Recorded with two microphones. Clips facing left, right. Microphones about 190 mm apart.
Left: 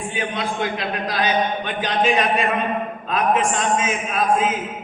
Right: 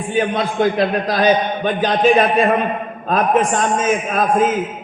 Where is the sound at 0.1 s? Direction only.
40° right (ahead or behind).